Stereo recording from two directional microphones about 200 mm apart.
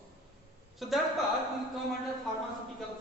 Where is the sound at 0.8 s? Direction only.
Centre (ahead or behind).